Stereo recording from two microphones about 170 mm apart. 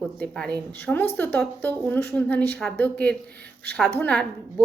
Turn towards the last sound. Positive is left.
turn(degrees=10)  # may be behind; listen again after turning